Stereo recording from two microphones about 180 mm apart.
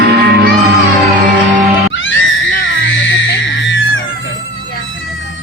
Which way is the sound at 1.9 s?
90° left.